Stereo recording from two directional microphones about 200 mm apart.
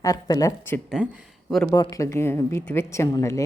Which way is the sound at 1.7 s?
15° left (ahead or behind).